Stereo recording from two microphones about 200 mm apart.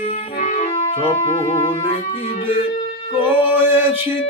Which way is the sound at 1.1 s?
35° left (ahead or behind).